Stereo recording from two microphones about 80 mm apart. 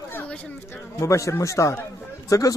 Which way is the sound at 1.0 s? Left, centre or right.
Left.